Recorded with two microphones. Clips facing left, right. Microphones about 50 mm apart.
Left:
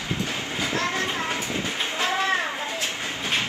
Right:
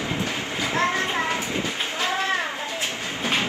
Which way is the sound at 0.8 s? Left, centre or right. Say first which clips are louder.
Right 5 dB; right.